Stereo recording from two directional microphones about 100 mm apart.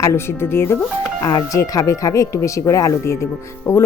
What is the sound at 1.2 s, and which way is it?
Speech, 35° left (ahead or behind).